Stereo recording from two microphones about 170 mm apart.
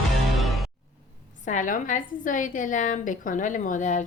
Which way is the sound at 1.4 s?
50° left (ahead or behind).